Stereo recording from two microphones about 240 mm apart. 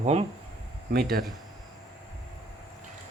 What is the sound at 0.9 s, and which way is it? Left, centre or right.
Speech, right.